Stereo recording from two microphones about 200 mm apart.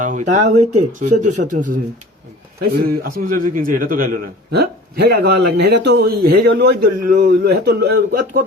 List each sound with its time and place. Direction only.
0.0 s a man's voice: 40° right (ahead or behind)